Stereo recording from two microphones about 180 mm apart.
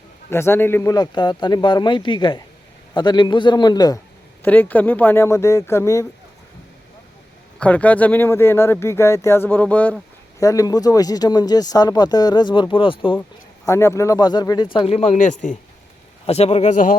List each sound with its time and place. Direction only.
0.3 s speech: 15° left (ahead or behind)
4.4 s speech: 10° left (ahead or behind)
7.6 s speech: 10° left (ahead or behind); by 13.1 s 30° left (ahead or behind)
13.7 s speech: 15° left (ahead or behind); by 17.0 s 50° left (ahead or behind)